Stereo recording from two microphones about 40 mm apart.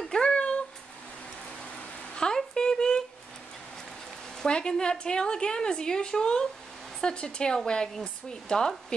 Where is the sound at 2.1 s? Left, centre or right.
Centre.